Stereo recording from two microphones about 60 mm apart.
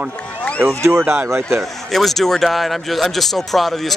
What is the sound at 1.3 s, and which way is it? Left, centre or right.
Speech, right.